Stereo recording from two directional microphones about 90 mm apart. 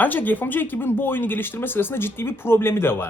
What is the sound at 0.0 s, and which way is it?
Speech, 20° left (ahead or behind).